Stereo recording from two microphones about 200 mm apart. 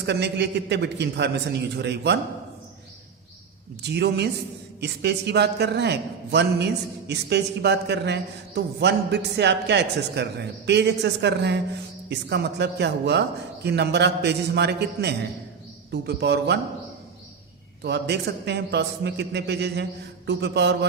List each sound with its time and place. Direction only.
0.0 s a man's voice: 60° right (ahead or behind)
3.8 s a man's voice: 55° right (ahead or behind)
17.8 s a man's voice: 60° right (ahead or behind)